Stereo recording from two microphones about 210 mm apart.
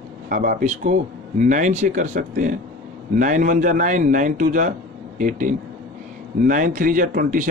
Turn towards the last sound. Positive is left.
turn(degrees=-45)  # may be behind; listen again after turning